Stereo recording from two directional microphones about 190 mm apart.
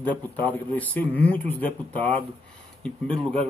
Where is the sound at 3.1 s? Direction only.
30° right (ahead or behind).